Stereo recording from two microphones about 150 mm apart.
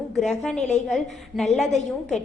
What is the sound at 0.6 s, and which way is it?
Speech, 50° left (ahead or behind).